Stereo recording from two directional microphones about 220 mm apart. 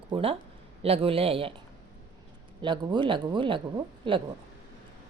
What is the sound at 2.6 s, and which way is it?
Speech, 20° right (ahead or behind).